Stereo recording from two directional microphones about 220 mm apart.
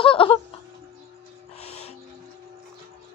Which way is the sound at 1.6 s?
30° left (ahead or behind).